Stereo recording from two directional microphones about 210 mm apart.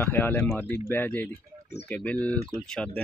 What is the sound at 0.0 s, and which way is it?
Speech, 10° left (ahead or behind).